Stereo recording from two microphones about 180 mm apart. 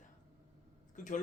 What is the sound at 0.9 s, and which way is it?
Speech, 45° left (ahead or behind).